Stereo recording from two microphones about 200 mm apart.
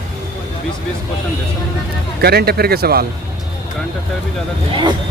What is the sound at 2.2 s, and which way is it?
Speech, 50° right (ahead or behind).